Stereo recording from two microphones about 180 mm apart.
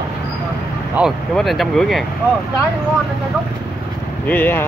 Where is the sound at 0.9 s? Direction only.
Centre (ahead or behind).